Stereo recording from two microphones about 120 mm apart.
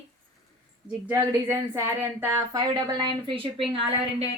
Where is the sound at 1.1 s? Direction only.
25° right (ahead or behind).